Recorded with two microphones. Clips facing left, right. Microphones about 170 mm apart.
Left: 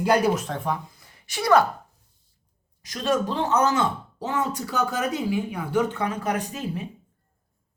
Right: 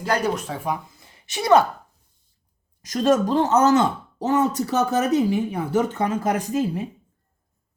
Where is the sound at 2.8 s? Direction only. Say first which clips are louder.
Right 5 dB; 45° right (ahead or behind).